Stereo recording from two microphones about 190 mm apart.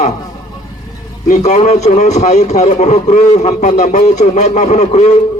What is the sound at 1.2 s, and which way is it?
A man's voice, 40° left (ahead or behind).